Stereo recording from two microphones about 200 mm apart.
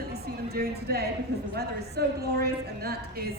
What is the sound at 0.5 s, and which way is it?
A woman's voice, 50° right (ahead or behind).